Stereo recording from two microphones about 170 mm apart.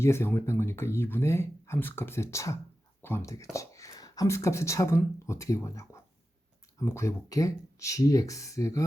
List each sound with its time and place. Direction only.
0.0 s speech: 15° left (ahead or behind)